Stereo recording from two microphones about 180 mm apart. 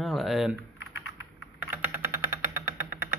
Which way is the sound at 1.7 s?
10° right (ahead or behind).